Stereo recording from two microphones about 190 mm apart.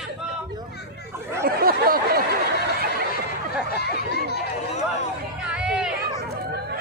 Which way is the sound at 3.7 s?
60° left (ahead or behind).